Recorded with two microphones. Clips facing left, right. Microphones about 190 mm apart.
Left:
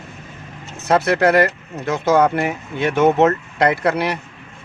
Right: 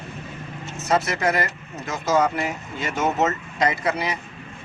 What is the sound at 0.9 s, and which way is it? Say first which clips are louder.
Speech: left 7 dB; 65° left (ahead or behind).